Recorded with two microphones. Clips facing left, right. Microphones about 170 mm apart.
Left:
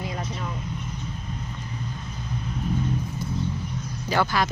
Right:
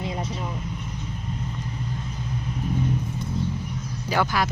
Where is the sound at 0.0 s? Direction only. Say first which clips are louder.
Right 2 dB; 25° right (ahead or behind).